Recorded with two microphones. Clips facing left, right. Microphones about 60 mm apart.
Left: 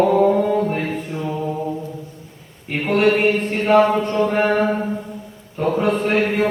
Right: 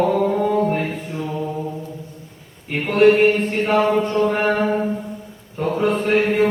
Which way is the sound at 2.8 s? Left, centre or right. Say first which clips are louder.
Right 3 dB; centre.